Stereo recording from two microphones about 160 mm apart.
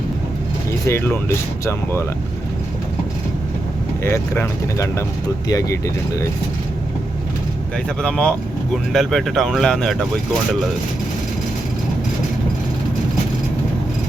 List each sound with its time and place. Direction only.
0.9 s speech: 15° left (ahead or behind)
4.0 s speech: 15° left (ahead or behind)
8.0 s speech: 5° left (ahead or behind)